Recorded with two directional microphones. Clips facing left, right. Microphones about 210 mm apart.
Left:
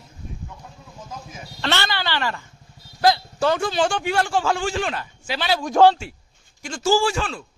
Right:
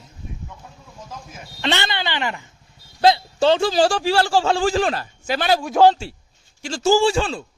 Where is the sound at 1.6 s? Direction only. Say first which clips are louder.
Right 1 dB; 20° right (ahead or behind); by 5.6 s 45° right (ahead or behind).